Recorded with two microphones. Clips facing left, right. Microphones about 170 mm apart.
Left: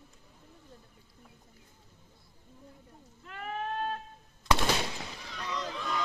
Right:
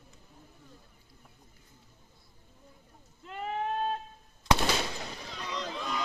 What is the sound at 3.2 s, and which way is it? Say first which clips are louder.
Sheep: right 3 dB; 20° right (ahead or behind).